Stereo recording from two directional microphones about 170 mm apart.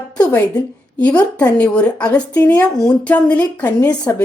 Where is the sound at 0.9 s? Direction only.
10° left (ahead or behind).